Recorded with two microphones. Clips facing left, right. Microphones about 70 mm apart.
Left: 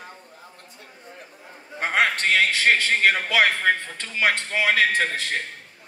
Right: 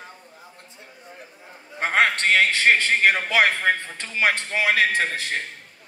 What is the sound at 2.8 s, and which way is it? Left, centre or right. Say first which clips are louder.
A man's voice: right 1 dB; centre.